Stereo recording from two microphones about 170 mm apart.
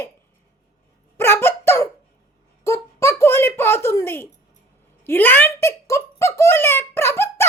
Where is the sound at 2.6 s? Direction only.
15° left (ahead or behind).